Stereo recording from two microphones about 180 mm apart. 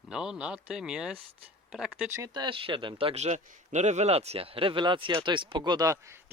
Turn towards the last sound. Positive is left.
turn(degrees=-15)  # may be behind; listen again after turning